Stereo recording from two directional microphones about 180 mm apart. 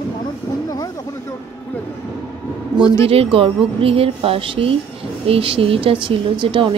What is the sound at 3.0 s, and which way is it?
A woman's voice, 30° right (ahead or behind).